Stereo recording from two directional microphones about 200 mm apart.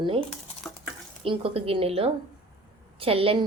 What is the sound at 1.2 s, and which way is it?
A woman's voice, 25° right (ahead or behind).